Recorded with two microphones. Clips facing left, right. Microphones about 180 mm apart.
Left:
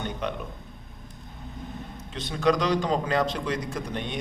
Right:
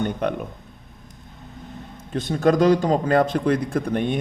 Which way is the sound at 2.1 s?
50° right (ahead or behind).